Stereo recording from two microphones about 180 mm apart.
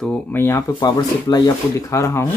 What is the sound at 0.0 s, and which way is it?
Speech, 5° left (ahead or behind).